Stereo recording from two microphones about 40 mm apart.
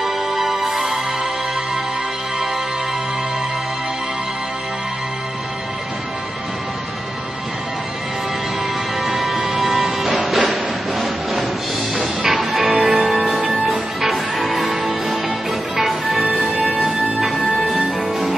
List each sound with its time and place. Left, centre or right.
0.0 s music: centre
9.0 s music: centre
17.7 s music: right